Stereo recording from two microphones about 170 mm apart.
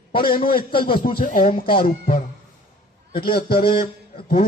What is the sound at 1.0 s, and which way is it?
Speech, 55° left (ahead or behind).